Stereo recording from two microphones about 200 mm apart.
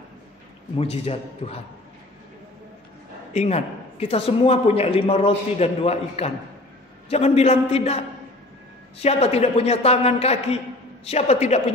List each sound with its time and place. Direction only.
0.7 s a man's voice: 30° left (ahead or behind)
3.3 s a man's voice: 30° left (ahead or behind)